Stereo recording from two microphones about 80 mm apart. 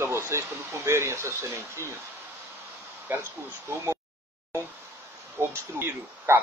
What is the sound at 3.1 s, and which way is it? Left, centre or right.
Speech, right.